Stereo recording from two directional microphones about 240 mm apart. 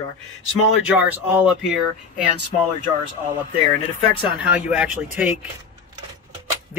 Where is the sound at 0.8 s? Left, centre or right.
Centre.